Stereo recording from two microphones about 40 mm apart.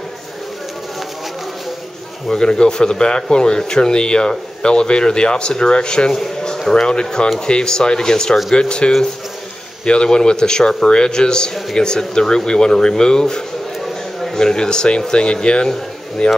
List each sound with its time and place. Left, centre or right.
2.2 s speech: centre
14.4 s speech: centre